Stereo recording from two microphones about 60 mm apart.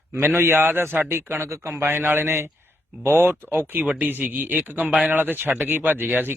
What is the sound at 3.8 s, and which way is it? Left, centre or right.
Speech, right.